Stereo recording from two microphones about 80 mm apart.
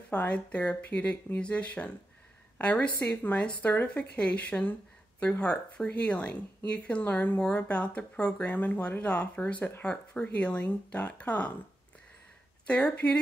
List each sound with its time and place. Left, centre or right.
0.1 s speech: centre
12.6 s speech: centre